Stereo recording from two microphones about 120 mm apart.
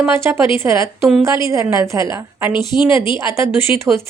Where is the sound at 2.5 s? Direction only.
40° left (ahead or behind).